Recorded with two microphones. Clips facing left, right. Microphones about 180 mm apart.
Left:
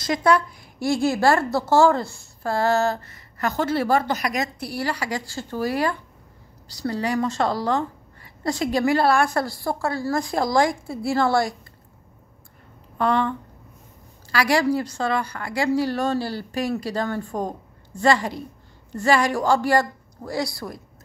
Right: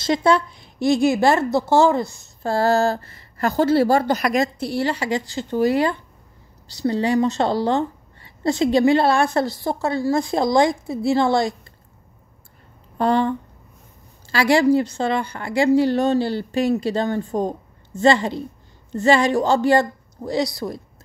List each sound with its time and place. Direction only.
0.0 s a woman's voice: 25° right (ahead or behind)
12.9 s speech: 30° right (ahead or behind)
14.3 s a woman's voice: 25° right (ahead or behind)